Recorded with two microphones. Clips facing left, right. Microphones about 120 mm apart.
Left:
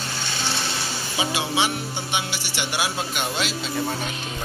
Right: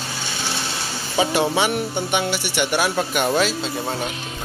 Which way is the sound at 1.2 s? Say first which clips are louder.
Right 5 dB; 50° right (ahead or behind).